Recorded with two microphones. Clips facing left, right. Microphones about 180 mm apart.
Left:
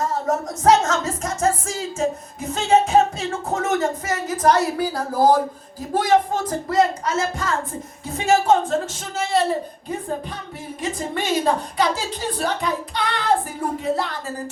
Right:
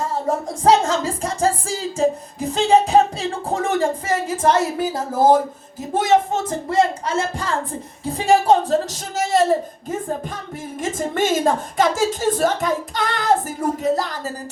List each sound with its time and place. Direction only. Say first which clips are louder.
0.0 s music: even; 30° right (ahead or behind)
5.9 s a woman's voice: right 1 dB; 25° right (ahead or behind); by 9.6 s 45° right (ahead or behind)
10.8 s a woman's voice: right 5 dB; 45° right (ahead or behind)